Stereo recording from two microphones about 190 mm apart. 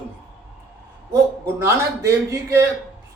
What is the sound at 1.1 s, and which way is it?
Speech, 15° right (ahead or behind).